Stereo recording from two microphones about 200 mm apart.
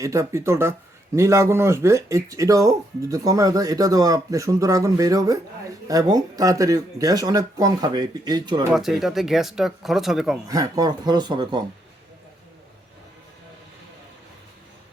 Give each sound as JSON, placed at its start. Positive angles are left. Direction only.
{"t": 0.0, "sound": "a man's voice", "side_deg": -15}
{"t": 8.7, "sound": "speech", "side_deg": 0}
{"t": 10.5, "sound": "speech", "side_deg": -20}